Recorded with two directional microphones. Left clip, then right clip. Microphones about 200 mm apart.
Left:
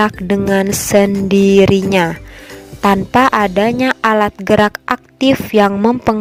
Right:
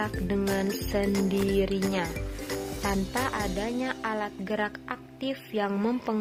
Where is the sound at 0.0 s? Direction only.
50° left (ahead or behind).